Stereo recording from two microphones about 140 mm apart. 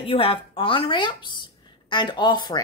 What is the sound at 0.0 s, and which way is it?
Speech, 40° left (ahead or behind).